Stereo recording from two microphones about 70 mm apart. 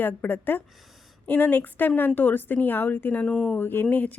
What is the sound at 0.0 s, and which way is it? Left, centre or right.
Speech, left.